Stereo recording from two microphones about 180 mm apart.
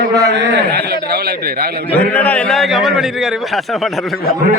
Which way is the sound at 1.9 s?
10° left (ahead or behind).